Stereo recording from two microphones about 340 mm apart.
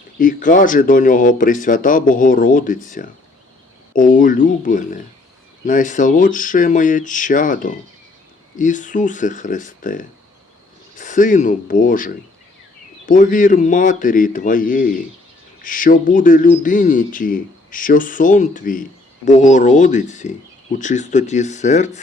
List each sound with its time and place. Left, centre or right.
0.2 s speech: left